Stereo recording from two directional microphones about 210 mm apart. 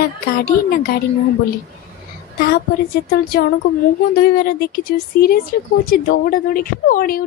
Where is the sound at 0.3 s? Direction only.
45° left (ahead or behind).